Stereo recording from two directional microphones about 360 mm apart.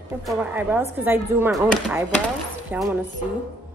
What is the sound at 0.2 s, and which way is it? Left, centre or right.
Speech, centre.